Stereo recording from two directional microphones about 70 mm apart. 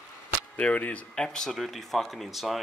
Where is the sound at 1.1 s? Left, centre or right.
Centre.